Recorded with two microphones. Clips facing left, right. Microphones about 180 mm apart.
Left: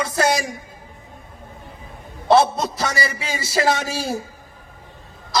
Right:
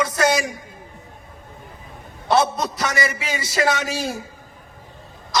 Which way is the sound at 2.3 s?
25° left (ahead or behind).